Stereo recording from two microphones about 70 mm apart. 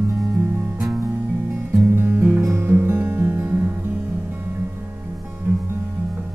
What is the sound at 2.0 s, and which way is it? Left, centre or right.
Music, right.